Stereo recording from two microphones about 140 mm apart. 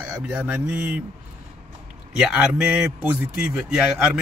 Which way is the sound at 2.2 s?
5° right (ahead or behind).